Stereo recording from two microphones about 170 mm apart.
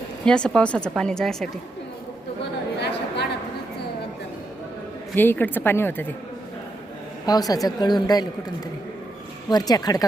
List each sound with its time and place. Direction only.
0.3 s speech: 5° left (ahead or behind)
2.7 s a sound: 80° left
5.1 s a woman's voice: 10° left (ahead or behind)
7.3 s speech: 20° left (ahead or behind)
9.5 s speech: 25° left (ahead or behind)